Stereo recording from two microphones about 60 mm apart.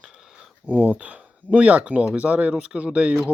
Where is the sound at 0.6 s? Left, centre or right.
Right.